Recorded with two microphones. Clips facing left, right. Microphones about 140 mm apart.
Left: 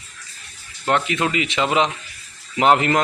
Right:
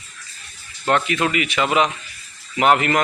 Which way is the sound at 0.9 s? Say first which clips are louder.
Right 1 dB; 20° left (ahead or behind).